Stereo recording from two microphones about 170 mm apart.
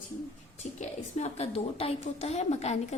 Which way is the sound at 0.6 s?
40° left (ahead or behind).